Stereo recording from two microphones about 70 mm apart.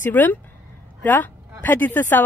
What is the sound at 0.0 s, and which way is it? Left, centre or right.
A woman's voice, left.